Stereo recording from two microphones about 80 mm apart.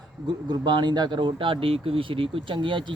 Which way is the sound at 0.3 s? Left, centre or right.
Right.